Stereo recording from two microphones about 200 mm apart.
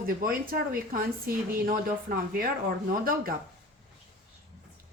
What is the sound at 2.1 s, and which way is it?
Speech, 45° right (ahead or behind).